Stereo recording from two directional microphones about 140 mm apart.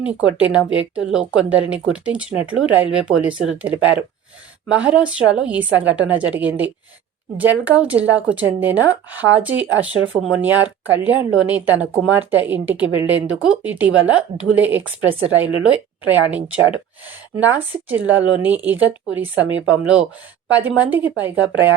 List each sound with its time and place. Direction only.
0.0 s speech: 10° right (ahead or behind)
20.5 s speech: 10° right (ahead or behind)